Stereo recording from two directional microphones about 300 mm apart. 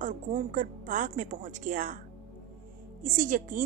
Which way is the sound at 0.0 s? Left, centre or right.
Right.